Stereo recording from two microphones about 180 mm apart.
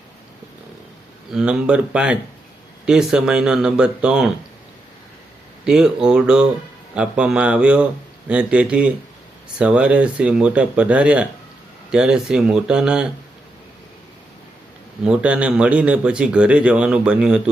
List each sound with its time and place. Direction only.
1.3 s a man's voice: 5° right (ahead or behind)
5.6 s a man's voice: 5° right (ahead or behind)
15.0 s a man's voice: 5° right (ahead or behind)